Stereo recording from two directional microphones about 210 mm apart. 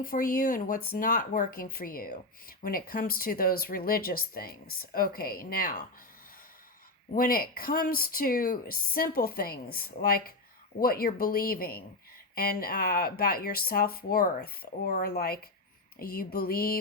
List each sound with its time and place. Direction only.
0.0 s speech: 40° left (ahead or behind)
7.1 s speech: 45° left (ahead or behind)